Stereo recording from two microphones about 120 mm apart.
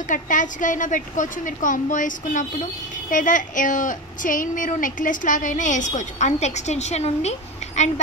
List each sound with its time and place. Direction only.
0.1 s a woman's voice: 90° left; by 7.9 s 70° left (ahead or behind)